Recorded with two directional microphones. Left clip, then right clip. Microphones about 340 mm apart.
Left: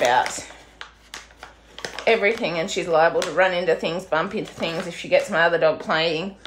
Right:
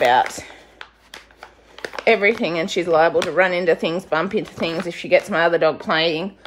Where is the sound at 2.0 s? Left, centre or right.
Right.